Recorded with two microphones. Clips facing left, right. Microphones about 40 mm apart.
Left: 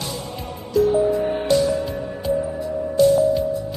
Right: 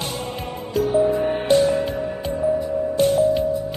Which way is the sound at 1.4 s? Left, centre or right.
Right.